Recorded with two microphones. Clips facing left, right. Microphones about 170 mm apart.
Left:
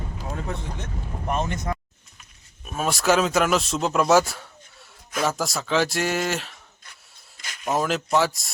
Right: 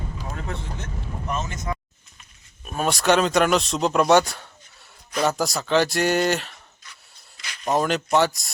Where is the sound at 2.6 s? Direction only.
Centre (ahead or behind).